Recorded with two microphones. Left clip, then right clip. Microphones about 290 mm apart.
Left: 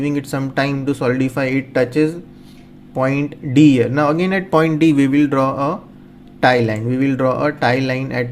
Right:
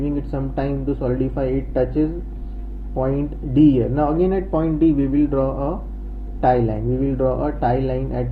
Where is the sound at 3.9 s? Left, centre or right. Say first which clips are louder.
Left 3 dB; left.